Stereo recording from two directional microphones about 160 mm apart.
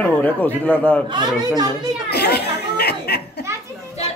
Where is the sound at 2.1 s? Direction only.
90° left.